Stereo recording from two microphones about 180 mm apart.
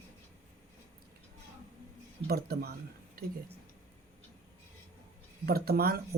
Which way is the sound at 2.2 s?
60° right (ahead or behind).